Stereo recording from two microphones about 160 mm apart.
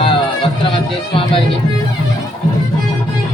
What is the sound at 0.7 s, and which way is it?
Speech, 35° left (ahead or behind).